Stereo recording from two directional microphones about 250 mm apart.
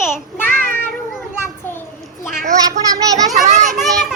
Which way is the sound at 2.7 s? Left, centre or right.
Centre.